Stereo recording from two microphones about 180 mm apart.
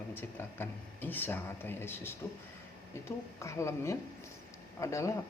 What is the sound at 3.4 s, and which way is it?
A man's voice, 15° left (ahead or behind).